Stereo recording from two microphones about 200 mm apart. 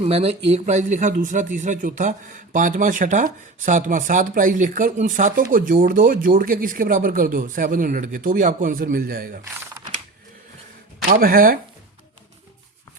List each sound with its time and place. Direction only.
0.0 s speech: 30° right (ahead or behind); by 9.4 s 45° right (ahead or behind)
11.1 s speech: 45° right (ahead or behind)